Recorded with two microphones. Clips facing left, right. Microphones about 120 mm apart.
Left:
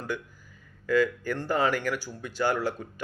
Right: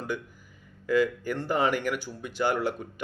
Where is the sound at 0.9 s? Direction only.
15° right (ahead or behind).